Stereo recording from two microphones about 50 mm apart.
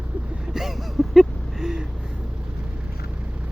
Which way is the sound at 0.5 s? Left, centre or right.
Centre.